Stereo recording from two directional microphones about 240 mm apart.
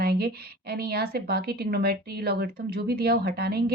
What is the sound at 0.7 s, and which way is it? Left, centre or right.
A woman's voice, right.